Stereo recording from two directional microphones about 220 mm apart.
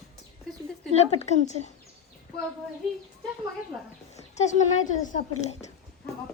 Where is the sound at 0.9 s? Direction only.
30° left (ahead or behind).